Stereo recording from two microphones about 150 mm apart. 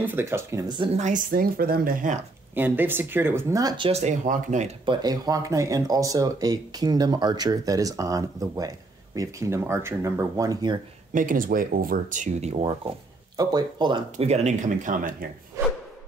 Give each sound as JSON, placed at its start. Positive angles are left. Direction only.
{"t": 0.0, "sound": "speech", "side_deg": -15}
{"t": 0.7, "sound": "speech", "side_deg": -50}
{"t": 2.5, "sound": "speech", "side_deg": -15}
{"t": 4.8, "sound": "speech", "side_deg": -30}
{"t": 11.1, "sound": "speech", "side_deg": -65}
{"t": 13.4, "sound": "speech", "side_deg": -25}
{"t": 14.1, "sound": "speech", "side_deg": -50}
{"t": 15.6, "sound": "wood", "side_deg": -20}